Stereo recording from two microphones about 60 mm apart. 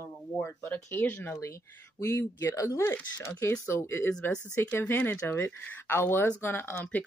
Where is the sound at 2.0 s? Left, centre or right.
Left.